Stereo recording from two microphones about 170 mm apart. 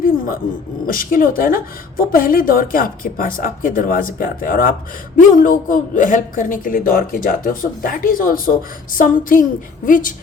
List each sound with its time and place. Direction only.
0.9 s a woman's voice: 55° left (ahead or behind)